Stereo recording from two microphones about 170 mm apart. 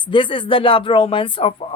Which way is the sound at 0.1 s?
30° left (ahead or behind).